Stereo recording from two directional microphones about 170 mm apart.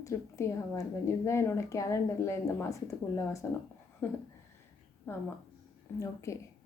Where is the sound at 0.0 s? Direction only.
15° left (ahead or behind).